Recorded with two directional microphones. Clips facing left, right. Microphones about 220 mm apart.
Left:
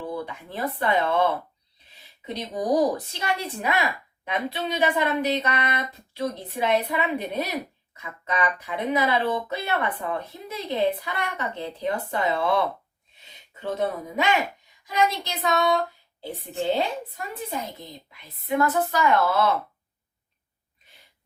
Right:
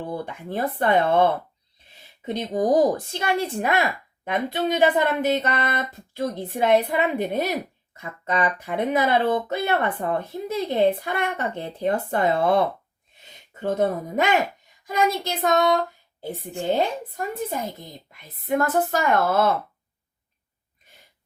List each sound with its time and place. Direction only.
0.1 s speech: 50° right (ahead or behind)